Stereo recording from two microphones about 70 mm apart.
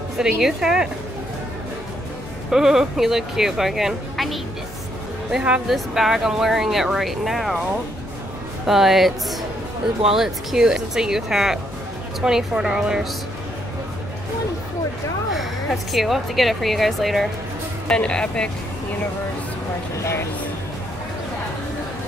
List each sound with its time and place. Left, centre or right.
0.2 s speech: centre
2.5 s speech: centre
5.7 s speech: centre
8.6 s speech: centre
15.3 s speech: centre
17.8 s speech: centre
20.0 s speech: left